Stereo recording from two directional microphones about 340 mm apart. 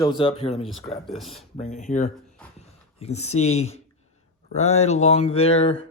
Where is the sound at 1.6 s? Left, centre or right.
Left.